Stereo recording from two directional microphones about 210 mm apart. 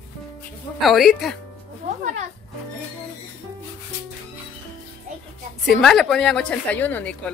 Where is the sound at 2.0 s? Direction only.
35° right (ahead or behind).